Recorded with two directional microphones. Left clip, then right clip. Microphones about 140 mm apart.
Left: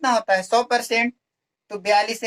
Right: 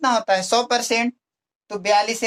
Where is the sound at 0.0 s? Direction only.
25° right (ahead or behind).